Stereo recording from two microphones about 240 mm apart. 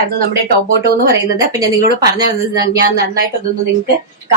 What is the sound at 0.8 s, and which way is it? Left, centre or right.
Speech, right.